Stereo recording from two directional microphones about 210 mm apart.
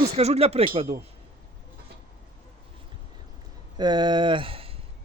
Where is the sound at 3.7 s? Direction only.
20° right (ahead or behind).